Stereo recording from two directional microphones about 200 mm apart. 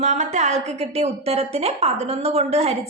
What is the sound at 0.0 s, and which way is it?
A woman's voice, 35° right (ahead or behind).